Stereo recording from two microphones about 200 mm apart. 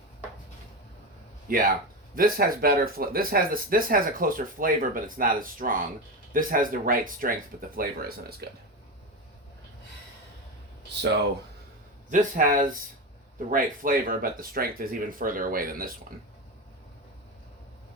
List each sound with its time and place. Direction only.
1.5 s speech: 45° right (ahead or behind)
12.1 s speech: 40° right (ahead or behind)